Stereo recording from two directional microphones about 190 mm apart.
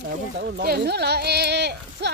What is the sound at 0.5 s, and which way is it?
Speech, 55° right (ahead or behind).